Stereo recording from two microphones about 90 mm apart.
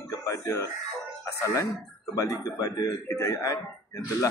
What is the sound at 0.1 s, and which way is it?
Chicken, 35° left (ahead or behind).